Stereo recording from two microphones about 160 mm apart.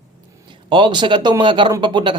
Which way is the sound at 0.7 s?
30° right (ahead or behind).